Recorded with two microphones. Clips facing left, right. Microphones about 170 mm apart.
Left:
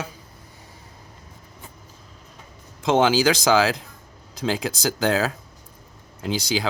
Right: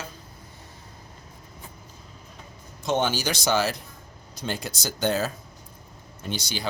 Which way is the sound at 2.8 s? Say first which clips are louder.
Left 7 dB; 90° left.